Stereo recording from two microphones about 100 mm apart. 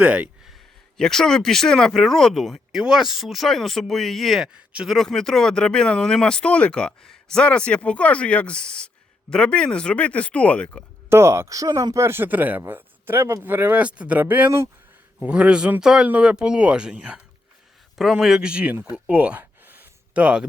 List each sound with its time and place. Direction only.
0.0 s speech: 15° right (ahead or behind)
0.4 s speech: centre (ahead or behind)
4.5 s speech: 10° right (ahead or behind)
4.9 s speech: 5° left (ahead or behind)
11.1 s speech: 30° right (ahead or behind); by 18.8 s 10° right (ahead or behind)
18.9 s a sound: 15° right (ahead or behind)